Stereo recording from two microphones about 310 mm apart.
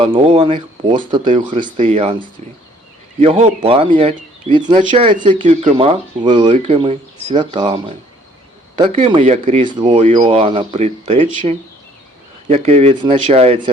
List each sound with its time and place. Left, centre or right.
0.0 s speech: centre
9.0 s speech: centre